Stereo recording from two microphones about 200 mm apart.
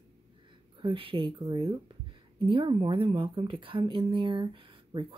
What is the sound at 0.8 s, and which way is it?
Speech, 25° right (ahead or behind).